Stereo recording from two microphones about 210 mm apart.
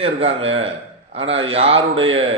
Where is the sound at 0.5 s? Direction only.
25° right (ahead or behind).